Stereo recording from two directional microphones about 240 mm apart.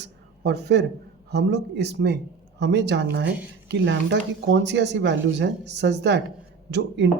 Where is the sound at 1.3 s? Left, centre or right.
Right.